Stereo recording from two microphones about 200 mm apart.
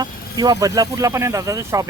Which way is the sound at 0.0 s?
20° right (ahead or behind).